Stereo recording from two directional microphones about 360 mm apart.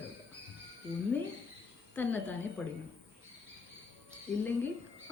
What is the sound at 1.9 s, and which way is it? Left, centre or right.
Speech, centre.